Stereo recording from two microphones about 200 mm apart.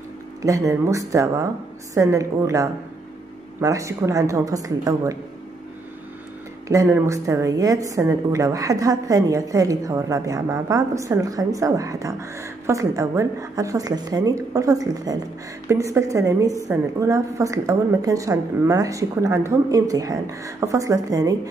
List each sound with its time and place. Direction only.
0.4 s a woman's voice: 15° right (ahead or behind)
6.7 s a woman's voice: 15° right (ahead or behind)